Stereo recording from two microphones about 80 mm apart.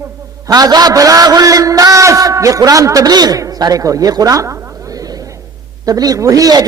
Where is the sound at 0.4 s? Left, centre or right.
Right.